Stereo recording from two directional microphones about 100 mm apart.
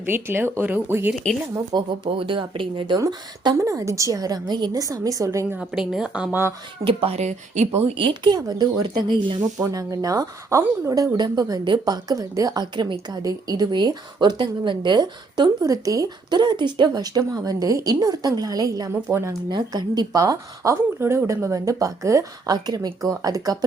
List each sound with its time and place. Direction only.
0.0 s speech: 20° right (ahead or behind)
1.7 s speech: 45° right (ahead or behind)
2.0 s speech: 60° right (ahead or behind)
3.0 s a woman's voice: 40° right (ahead or behind)
5.5 s speech: 5° right (ahead or behind)
6.8 s speech: 80° right; by 8.4 s 55° right (ahead or behind)
8.4 s speech: 40° right (ahead or behind)
9.6 s a woman's voice: 35° right (ahead or behind)
19.5 s a woman's voice: 45° right (ahead or behind)